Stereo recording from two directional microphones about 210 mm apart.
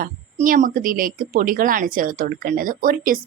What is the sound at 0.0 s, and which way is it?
Speech, 40° right (ahead or behind).